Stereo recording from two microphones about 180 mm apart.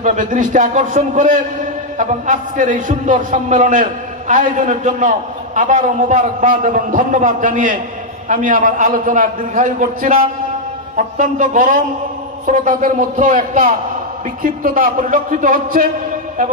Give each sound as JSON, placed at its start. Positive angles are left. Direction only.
{"t": 0.0, "sound": "a man's voice", "side_deg": -45}